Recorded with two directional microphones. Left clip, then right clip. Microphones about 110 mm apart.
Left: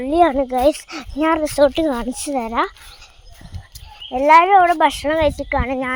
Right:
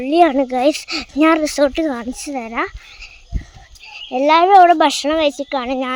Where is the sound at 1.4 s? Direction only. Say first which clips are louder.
Even; 25° right (ahead or behind).